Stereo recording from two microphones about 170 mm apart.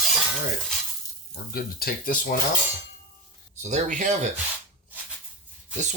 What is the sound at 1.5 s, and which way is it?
Speech, 60° left (ahead or behind).